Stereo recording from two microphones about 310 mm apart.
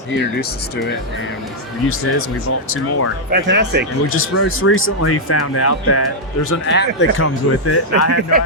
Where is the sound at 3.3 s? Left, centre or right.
Right.